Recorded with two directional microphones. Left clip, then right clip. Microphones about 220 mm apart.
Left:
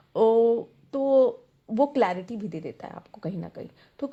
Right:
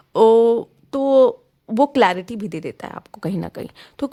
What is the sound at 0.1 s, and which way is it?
Speech, 40° right (ahead or behind).